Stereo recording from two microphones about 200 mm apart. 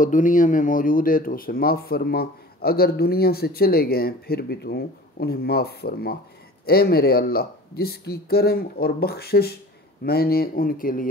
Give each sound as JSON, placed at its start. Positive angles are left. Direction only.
{"t": 0.0, "sound": "speech", "side_deg": 40}